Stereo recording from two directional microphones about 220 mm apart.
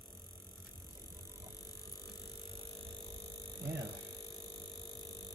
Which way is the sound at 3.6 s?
45° right (ahead or behind).